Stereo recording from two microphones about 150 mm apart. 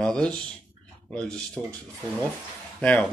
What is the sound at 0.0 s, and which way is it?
Speech, 5° left (ahead or behind).